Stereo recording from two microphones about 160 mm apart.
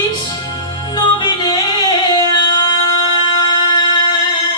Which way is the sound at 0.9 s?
25° left (ahead or behind).